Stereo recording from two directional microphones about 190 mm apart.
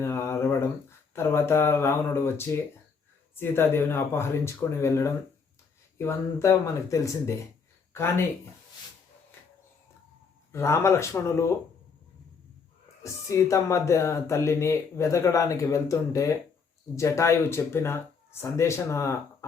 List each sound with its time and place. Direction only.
0.0 s a sound: 15° left (ahead or behind)
0.9 s speech: 15° left (ahead or behind)
10.5 s speech: 15° left (ahead or behind)
13.0 s speech: 15° left (ahead or behind)